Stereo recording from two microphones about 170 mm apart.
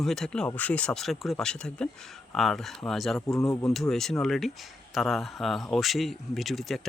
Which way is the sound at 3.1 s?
15° left (ahead or behind).